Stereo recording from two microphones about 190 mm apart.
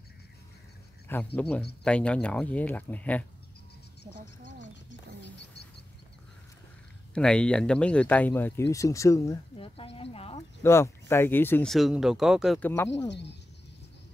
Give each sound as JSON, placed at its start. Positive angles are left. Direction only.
{"t": 1.0, "sound": "speech", "side_deg": 10}
{"t": 7.2, "sound": "speech", "side_deg": 5}
{"t": 9.6, "sound": "speech", "side_deg": 30}
{"t": 10.6, "sound": "speech", "side_deg": 15}
{"t": 12.5, "sound": "speech", "side_deg": 10}
{"t": 13.1, "sound": "speech", "side_deg": 65}